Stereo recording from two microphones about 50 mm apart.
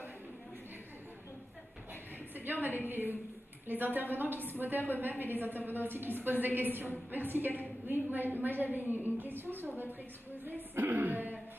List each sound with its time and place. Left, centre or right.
2.3 s a woman's voice: right